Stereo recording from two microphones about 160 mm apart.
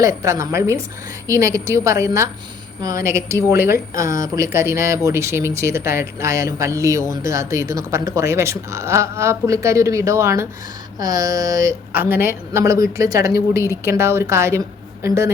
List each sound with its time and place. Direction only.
0.0 s a woman's voice: 20° right (ahead or behind)